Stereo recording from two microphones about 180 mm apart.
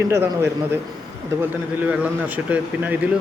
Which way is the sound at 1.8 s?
10° right (ahead or behind).